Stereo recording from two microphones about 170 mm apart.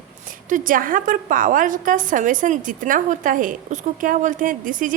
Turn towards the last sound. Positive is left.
turn(degrees=-50)  # may be behind; listen again after turning